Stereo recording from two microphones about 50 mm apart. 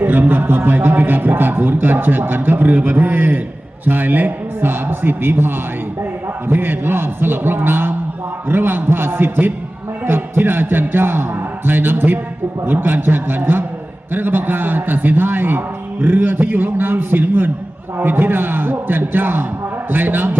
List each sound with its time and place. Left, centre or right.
0.0 s a man's voice: right